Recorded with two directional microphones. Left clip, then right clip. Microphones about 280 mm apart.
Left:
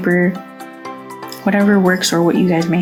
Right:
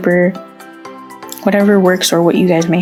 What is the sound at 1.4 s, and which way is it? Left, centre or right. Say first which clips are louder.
Speech: right 4 dB; right.